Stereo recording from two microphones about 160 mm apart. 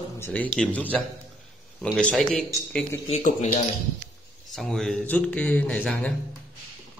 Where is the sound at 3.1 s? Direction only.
50° left (ahead or behind).